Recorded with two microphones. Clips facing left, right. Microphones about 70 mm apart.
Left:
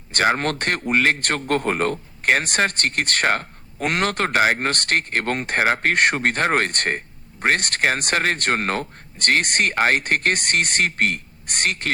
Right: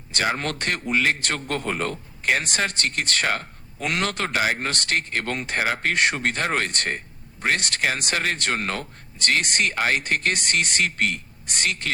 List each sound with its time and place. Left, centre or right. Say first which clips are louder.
0.1 s a man's voice: left 5 dB; left